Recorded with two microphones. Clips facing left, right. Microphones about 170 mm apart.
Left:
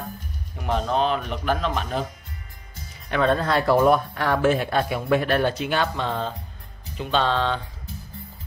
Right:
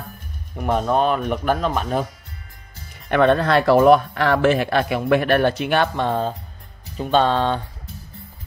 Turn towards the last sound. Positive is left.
turn(degrees=-45)  # may be behind; listen again after turning